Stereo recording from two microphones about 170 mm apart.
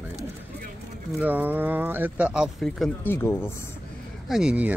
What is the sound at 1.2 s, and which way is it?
Speech, 10° right (ahead or behind).